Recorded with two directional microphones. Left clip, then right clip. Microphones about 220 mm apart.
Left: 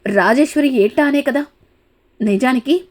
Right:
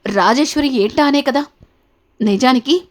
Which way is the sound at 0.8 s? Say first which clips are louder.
Right 1 dB; 10° right (ahead or behind).